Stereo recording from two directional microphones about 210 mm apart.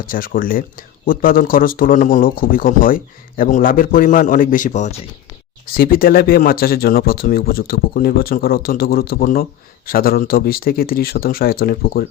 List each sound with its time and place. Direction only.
0.1 s speech: 40° left (ahead or behind)
5.7 s speech: 45° left (ahead or behind)